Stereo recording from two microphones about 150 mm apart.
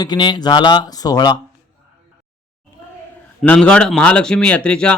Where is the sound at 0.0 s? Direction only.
30° left (ahead or behind).